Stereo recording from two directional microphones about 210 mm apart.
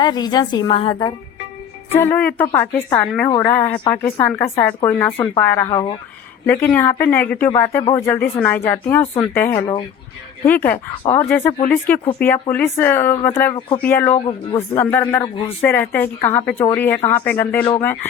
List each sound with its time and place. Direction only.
0.0 s a woman's voice: 20° left (ahead or behind)
1.9 s a woman's voice: 10° left (ahead or behind)
6.4 s a woman's voice: 10° left (ahead or behind)
13.5 s a woman's voice: 25° left (ahead or behind)
13.8 s speech: 10° left (ahead or behind)